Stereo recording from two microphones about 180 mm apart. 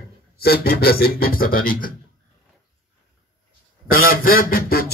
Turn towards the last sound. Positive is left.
turn(degrees=55)  # may be behind; listen again after turning